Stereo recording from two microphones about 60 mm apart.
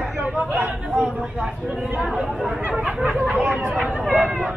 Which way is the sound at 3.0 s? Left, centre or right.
Right.